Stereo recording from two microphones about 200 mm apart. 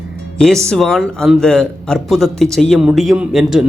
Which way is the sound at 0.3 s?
5° left (ahead or behind).